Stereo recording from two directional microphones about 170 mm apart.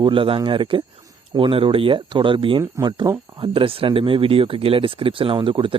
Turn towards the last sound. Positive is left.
turn(degrees=-30)  # may be behind; listen again after turning